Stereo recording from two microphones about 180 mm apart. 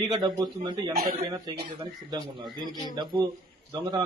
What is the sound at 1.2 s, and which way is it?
Speech, 25° right (ahead or behind).